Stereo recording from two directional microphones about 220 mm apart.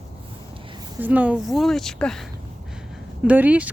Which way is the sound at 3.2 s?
5° right (ahead or behind).